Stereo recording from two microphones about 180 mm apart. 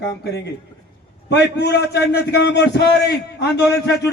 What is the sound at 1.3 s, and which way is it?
A man's voice, 70° left (ahead or behind).